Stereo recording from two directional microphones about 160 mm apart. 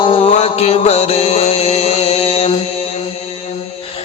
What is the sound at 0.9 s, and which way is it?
Music, 40° left (ahead or behind).